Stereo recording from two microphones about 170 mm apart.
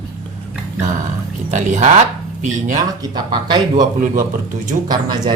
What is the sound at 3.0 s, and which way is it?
Speech, 25° right (ahead or behind).